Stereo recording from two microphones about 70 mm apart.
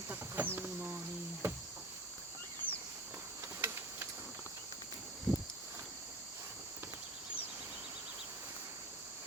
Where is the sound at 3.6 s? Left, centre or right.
Right.